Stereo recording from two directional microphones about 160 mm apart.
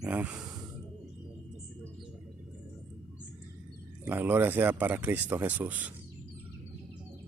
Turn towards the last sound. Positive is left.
turn(degrees=-10)  # may be behind; listen again after turning